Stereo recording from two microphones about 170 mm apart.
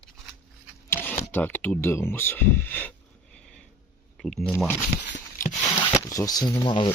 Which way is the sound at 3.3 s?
5° left (ahead or behind).